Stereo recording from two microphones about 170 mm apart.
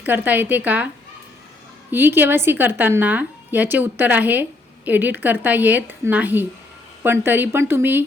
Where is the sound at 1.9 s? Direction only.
10° right (ahead or behind).